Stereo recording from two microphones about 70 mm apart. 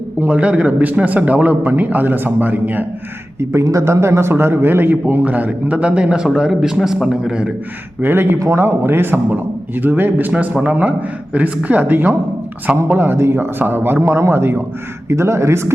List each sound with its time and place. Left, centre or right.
0.2 s a man's voice: centre
3.5 s a man's voice: right; by 7.3 s centre
8.0 s a man's voice: right